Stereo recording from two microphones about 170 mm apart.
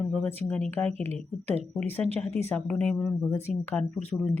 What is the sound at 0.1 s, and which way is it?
Speech, 15° left (ahead or behind).